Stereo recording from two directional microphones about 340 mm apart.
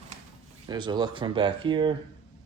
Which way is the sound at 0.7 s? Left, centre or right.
Centre.